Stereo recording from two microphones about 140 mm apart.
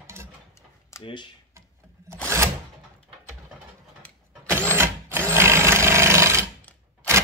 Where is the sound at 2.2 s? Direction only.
20° right (ahead or behind).